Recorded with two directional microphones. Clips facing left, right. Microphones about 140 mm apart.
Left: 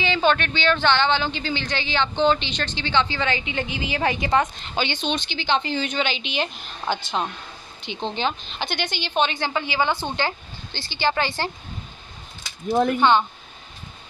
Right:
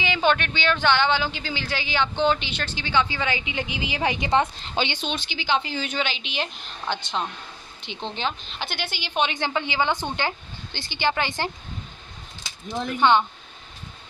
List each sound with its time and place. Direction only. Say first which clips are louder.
0.0 s speech: left 2 dB; 15° right (ahead or behind)
4.9 s speech: left 4 dB; 5° right (ahead or behind)
12.6 s speech: left 9 dB; 50° left (ahead or behind)